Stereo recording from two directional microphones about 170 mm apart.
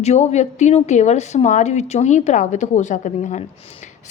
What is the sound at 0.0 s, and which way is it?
A woman's voice, 40° left (ahead or behind).